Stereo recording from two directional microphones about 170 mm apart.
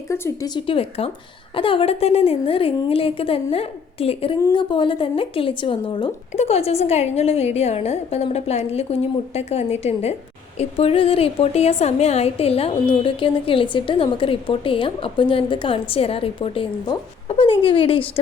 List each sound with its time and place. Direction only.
0.1 s a woman's voice: 20° left (ahead or behind)